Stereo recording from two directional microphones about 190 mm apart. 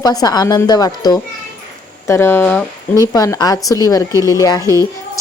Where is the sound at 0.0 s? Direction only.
20° left (ahead or behind).